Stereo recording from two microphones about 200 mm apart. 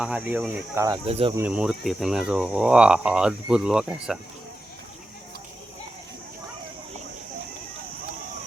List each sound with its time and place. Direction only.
0.0 s speech: 5° right (ahead or behind)
1.0 s speech: 30° right (ahead or behind)
1.4 s speech: 5° right (ahead or behind)